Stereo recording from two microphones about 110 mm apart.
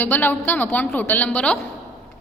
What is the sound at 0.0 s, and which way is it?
A woman's voice, 15° left (ahead or behind).